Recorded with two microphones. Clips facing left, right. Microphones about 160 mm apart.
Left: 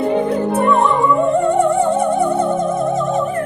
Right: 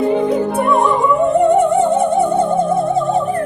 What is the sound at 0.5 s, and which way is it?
Music, 15° right (ahead or behind).